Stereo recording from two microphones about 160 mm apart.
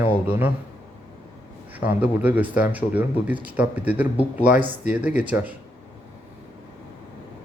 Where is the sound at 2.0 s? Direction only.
10° right (ahead or behind).